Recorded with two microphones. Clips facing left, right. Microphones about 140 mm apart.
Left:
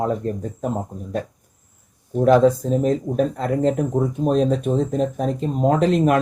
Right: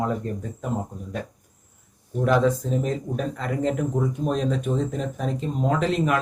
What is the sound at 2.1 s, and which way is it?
Speech, 40° left (ahead or behind).